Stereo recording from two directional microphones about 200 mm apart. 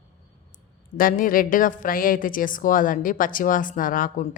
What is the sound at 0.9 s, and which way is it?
A woman's voice, 45° left (ahead or behind).